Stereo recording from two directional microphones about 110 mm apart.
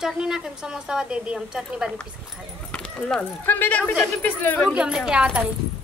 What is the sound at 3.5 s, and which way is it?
Speech, 15° left (ahead or behind).